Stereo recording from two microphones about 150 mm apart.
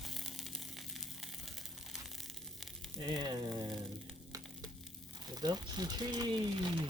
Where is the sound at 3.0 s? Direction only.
30° right (ahead or behind).